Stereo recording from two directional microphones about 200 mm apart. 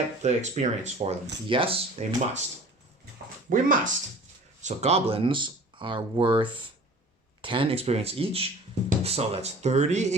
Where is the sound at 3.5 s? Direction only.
40° right (ahead or behind).